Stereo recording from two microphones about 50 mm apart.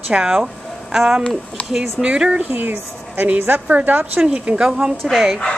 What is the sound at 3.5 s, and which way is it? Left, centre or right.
Speech, right.